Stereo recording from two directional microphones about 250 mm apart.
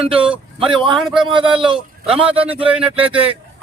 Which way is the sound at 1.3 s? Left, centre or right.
Centre.